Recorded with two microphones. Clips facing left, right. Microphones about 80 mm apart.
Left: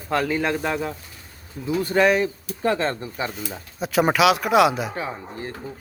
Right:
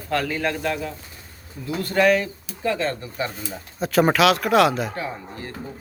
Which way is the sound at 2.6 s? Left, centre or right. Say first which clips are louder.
Left 2 dB; left.